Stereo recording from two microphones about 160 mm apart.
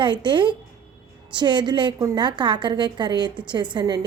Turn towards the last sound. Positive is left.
turn(degrees=-25)  # may be behind; listen again after turning